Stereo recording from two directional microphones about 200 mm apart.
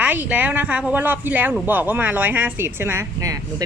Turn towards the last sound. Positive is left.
turn(degrees=-15)  # may be behind; listen again after turning